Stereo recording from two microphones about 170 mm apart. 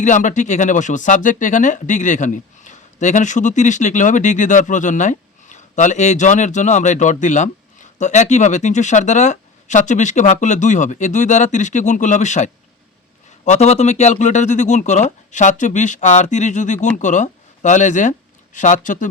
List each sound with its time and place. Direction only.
0.0 s speech: 45° left (ahead or behind)